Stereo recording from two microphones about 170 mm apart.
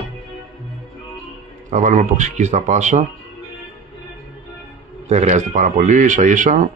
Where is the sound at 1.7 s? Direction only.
45° right (ahead or behind).